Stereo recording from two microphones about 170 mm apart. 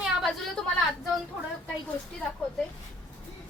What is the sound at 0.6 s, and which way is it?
Speech, 5° left (ahead or behind).